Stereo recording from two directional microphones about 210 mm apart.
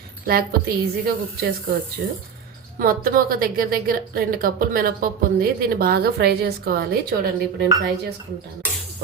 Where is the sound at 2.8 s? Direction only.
45° right (ahead or behind).